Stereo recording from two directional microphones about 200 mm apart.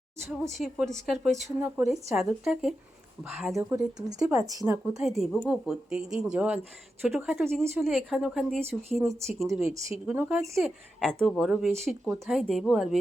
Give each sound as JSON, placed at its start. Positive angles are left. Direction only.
{"t": 0.5, "sound": "speech", "side_deg": 0}
{"t": 1.8, "sound": "speech", "side_deg": -15}
{"t": 2.1, "sound": "speech", "side_deg": 0}
{"t": 3.6, "sound": "speech", "side_deg": -15}
{"t": 4.9, "sound": "speech", "side_deg": 0}
{"t": 9.6, "sound": "speech", "side_deg": 30}
{"t": 10.1, "sound": "speech", "side_deg": -5}